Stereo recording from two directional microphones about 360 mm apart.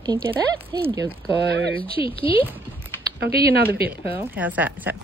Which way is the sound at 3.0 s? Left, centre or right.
Right.